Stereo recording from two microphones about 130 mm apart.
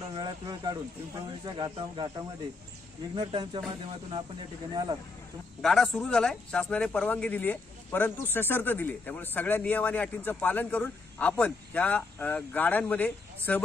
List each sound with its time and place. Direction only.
0.2 s speech: 30° right (ahead or behind)
5.6 s a man's voice: 5° left (ahead or behind)